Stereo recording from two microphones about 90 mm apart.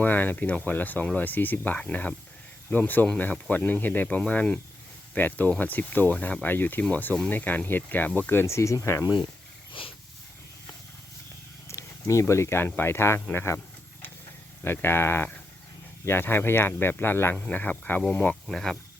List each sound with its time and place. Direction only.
0.0 s speech: 20° left (ahead or behind)
9.8 s dog: 80° left
11.7 s a sound: 35° left (ahead or behind)
12.2 s speech: 30° left (ahead or behind)
14.6 s speech: 25° left (ahead or behind)
17.3 s speech: 15° left (ahead or behind)
18.4 s speech: 5° left (ahead or behind)